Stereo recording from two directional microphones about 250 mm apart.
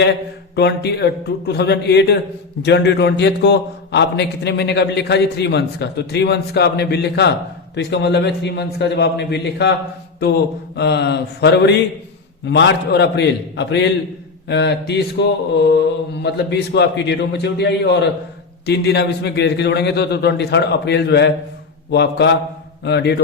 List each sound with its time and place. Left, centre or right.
0.5 s a man's voice: left
10.8 s a man's voice: left